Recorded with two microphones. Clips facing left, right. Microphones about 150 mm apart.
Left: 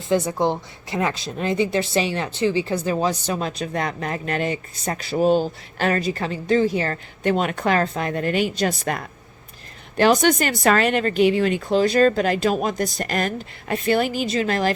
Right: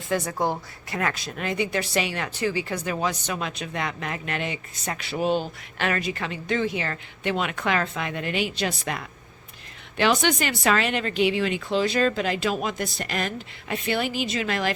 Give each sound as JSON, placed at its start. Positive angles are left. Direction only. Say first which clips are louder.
{"t": 0.1, "sound": "a woman's voice", "louder": "left 5 dB", "side_deg": 25}